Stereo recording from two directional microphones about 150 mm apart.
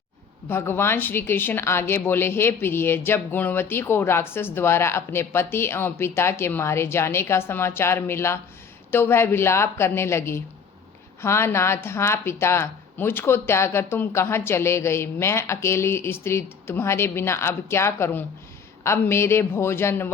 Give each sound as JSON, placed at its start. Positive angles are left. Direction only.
{"t": 0.4, "sound": "a woman's voice", "side_deg": 15}